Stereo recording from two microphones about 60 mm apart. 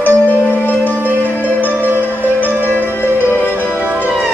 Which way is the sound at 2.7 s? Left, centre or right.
Left.